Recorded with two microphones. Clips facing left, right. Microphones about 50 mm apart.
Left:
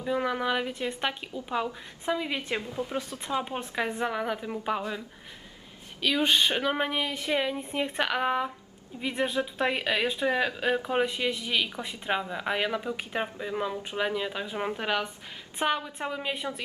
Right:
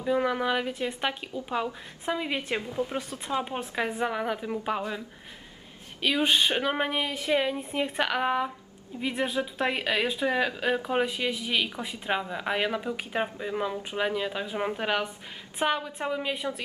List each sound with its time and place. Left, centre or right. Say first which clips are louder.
0.0 s speech: right 2 dB; centre